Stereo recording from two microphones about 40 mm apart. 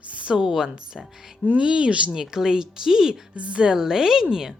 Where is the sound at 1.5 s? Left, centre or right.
Right.